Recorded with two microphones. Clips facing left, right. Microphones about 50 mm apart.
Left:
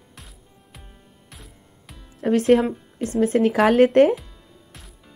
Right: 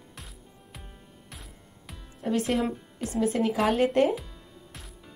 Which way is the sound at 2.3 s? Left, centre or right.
Left.